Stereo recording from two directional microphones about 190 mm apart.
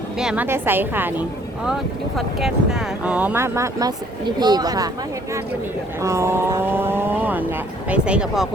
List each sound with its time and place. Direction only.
0.2 s speech: 5° right (ahead or behind)
6.0 s speech: 15° right (ahead or behind)